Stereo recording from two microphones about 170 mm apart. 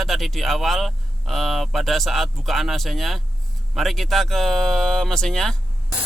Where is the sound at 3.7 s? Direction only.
Centre (ahead or behind).